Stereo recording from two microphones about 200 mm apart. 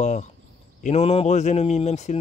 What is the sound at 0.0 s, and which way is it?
Speech, 35° left (ahead or behind).